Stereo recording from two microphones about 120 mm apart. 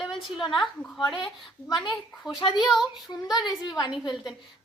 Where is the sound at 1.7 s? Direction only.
40° left (ahead or behind).